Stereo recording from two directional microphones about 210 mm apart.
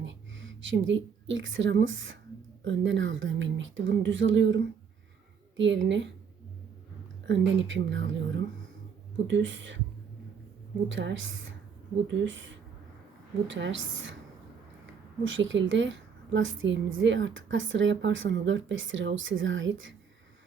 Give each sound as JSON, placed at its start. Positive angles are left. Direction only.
{"t": 0.0, "sound": "a woman's voice", "side_deg": -60}
{"t": 7.3, "sound": "a woman's voice", "side_deg": -60}
{"t": 9.2, "sound": "a woman's voice", "side_deg": -60}
{"t": 10.8, "sound": "a woman's voice", "side_deg": -60}
{"t": 15.2, "sound": "a woman's voice", "side_deg": -65}